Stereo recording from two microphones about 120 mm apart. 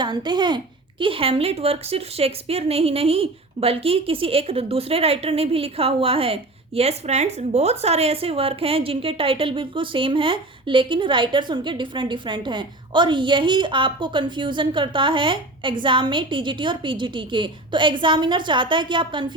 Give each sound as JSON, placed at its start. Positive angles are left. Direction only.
{"t": 0.0, "sound": "a child's voice", "side_deg": -40}